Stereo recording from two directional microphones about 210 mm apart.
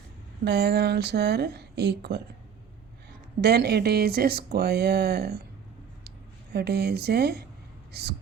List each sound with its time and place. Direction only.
0.4 s speech: 50° right (ahead or behind)
3.4 s speech: 50° right (ahead or behind)